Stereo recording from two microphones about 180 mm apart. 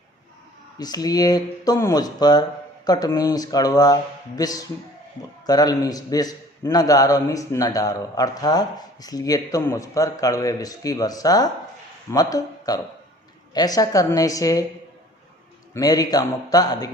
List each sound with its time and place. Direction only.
0.8 s a man's voice: 20° left (ahead or behind)
15.7 s a man's voice: 20° left (ahead or behind)